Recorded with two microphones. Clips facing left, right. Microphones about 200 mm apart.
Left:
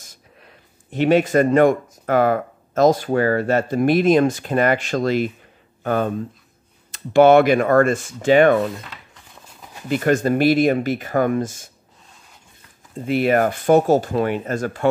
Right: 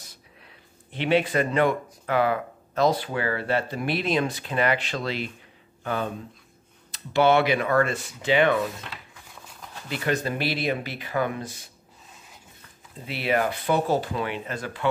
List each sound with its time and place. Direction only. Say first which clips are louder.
0.0 s speech: left 2 dB; 45° left (ahead or behind)
9.8 s speech: left 9 dB; 50° left (ahead or behind)
13.0 s speech: left 8 dB; 50° left (ahead or behind)